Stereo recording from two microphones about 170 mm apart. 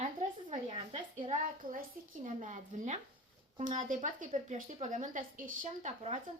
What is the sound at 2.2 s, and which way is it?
Speech, 45° right (ahead or behind).